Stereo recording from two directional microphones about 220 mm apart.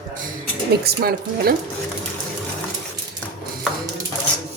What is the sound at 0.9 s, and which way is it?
Speech, 45° right (ahead or behind).